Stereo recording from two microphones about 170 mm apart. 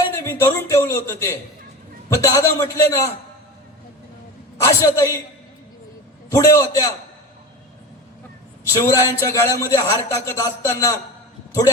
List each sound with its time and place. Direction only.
0.2 s a man's voice: 15° left (ahead or behind)
4.5 s a man's voice: 15° left (ahead or behind)
6.3 s a man's voice: 20° left (ahead or behind)
8.6 s a man's voice: 15° left (ahead or behind)